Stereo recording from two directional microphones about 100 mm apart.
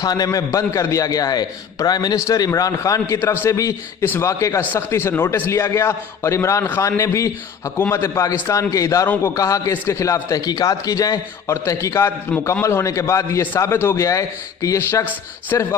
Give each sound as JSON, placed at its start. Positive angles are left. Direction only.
{"t": 0.0, "sound": "a man's voice", "side_deg": 40}
{"t": 9.0, "sound": "a man's voice", "side_deg": 20}
{"t": 9.3, "sound": "a man's voice", "side_deg": 35}